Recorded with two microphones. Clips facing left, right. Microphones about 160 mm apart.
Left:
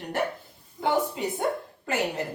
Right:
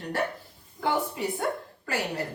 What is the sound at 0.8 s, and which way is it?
A woman's voice, 20° left (ahead or behind).